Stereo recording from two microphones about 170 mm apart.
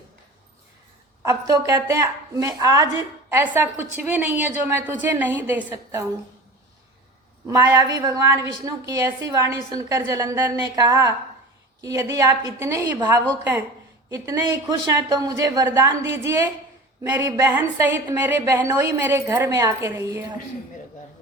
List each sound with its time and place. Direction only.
1.2 s a woman's voice: 15° right (ahead or behind)
7.4 s a woman's voice: 20° right (ahead or behind)